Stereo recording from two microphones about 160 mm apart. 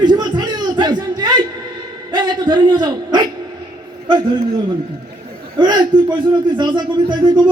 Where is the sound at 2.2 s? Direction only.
25° right (ahead or behind).